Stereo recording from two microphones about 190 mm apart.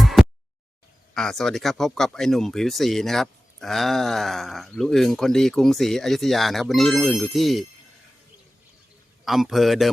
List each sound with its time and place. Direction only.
0.0 s a sound: centre (ahead or behind)
1.1 s speech: centre (ahead or behind)
9.2 s speech: centre (ahead or behind)